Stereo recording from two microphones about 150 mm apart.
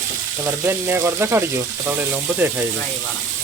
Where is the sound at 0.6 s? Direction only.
15° right (ahead or behind).